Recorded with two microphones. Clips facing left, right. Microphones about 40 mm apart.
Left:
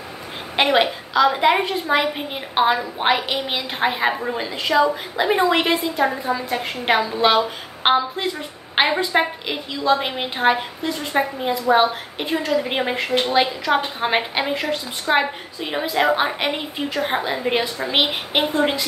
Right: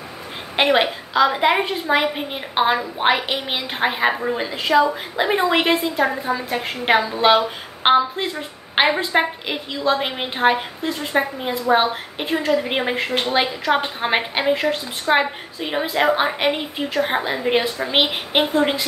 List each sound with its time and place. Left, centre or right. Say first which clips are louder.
0.6 s a woman's voice: even; centre
13.1 s a woman's voice: left 4 dB; right
14.0 s a woman's voice: right 1 dB; centre